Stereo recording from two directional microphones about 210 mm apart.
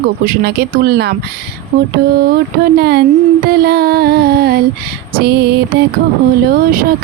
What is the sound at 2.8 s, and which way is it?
Speech, 50° right (ahead or behind).